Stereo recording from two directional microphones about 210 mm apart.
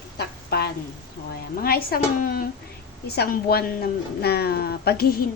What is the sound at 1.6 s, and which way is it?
A woman's voice, 45° left (ahead or behind).